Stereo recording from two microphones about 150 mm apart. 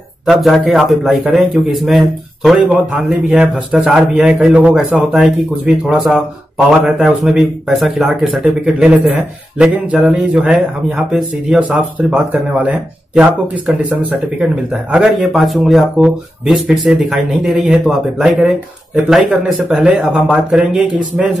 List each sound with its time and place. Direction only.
0.3 s speech: centre (ahead or behind)